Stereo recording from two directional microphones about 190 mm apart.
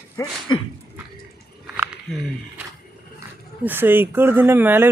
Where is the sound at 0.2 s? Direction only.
25° left (ahead or behind).